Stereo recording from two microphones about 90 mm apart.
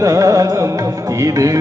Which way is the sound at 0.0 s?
40° right (ahead or behind).